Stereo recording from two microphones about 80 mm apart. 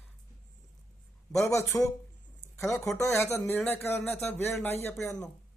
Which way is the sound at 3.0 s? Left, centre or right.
Left.